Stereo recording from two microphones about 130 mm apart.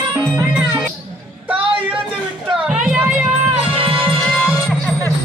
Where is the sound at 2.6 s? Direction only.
10° right (ahead or behind).